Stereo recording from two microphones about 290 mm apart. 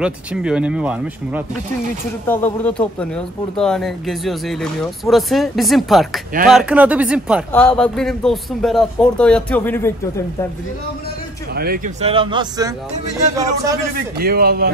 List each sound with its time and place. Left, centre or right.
0.0 s speech: centre
2.2 s speech: centre
11.5 s a man's voice: right; by 12.7 s centre
14.1 s a man's voice: right